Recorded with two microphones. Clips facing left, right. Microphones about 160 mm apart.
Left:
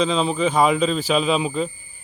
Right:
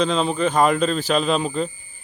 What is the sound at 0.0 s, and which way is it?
Speech, centre (ahead or behind).